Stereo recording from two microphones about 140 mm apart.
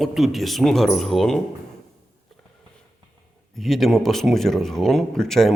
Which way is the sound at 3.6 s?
Centre (ahead or behind).